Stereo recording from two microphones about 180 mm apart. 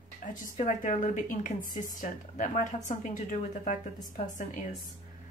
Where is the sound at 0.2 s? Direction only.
45° left (ahead or behind).